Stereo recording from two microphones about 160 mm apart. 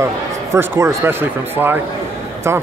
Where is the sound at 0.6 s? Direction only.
15° right (ahead or behind).